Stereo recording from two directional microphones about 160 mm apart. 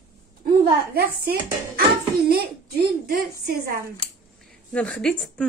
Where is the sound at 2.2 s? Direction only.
75° right (ahead or behind).